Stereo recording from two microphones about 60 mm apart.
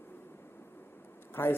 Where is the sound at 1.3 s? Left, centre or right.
Left.